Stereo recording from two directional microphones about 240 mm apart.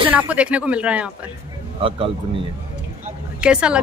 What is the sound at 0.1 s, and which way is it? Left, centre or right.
Speech, centre.